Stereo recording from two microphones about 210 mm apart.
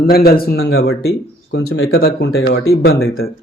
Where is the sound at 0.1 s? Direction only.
45° left (ahead or behind).